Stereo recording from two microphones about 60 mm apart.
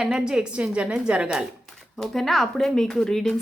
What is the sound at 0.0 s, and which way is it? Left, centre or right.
A woman's voice, centre.